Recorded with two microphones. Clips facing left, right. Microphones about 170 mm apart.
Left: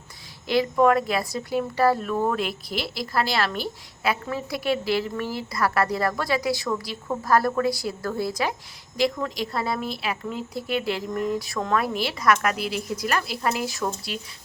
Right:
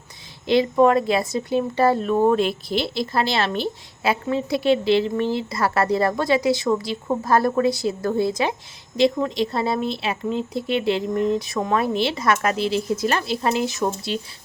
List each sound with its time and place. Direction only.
0.4 s a woman's voice: 25° right (ahead or behind)